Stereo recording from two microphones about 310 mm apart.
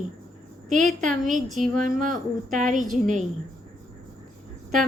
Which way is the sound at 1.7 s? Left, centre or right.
Right.